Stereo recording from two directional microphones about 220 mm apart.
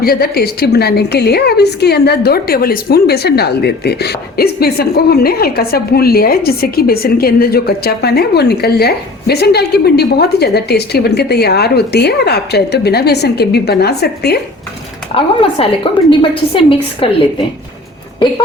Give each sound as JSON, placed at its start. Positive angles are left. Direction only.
{"t": 0.0, "sound": "a woman's voice", "side_deg": 45}
{"t": 15.1, "sound": "a woman's voice", "side_deg": 25}